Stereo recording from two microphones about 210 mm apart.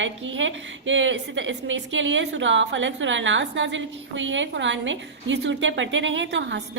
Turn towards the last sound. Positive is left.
turn(degrees=-60)  # may be behind; listen again after turning